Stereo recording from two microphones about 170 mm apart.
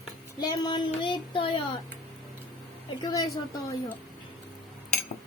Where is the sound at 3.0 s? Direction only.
25° left (ahead or behind).